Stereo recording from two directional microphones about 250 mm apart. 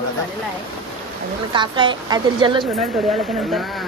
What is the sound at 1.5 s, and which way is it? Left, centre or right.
A woman's voice, centre.